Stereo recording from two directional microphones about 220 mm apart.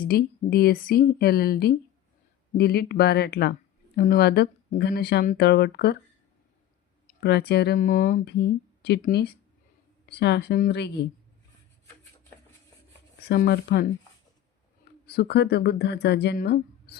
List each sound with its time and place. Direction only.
0.0 s speech: 40° left (ahead or behind)
7.1 s speech: 50° left (ahead or behind)
13.2 s speech: 45° left (ahead or behind)
15.0 s speech: 45° left (ahead or behind)